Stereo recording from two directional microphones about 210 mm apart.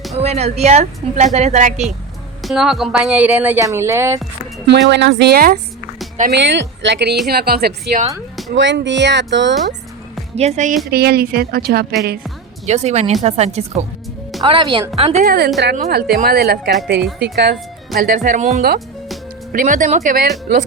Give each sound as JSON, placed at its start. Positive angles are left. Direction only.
{"t": 0.2, "sound": "speech", "side_deg": -30}
{"t": 2.4, "sound": "speech", "side_deg": 0}
{"t": 4.6, "sound": "a woman's voice", "side_deg": -55}
{"t": 6.3, "sound": "a woman's voice", "side_deg": -55}
{"t": 8.5, "sound": "speech", "side_deg": -60}
{"t": 10.3, "sound": "speech", "side_deg": -30}
{"t": 10.8, "sound": "a woman's voice", "side_deg": -50}
{"t": 12.6, "sound": "speech", "side_deg": -30}
{"t": 14.9, "sound": "a woman's voice", "side_deg": -30}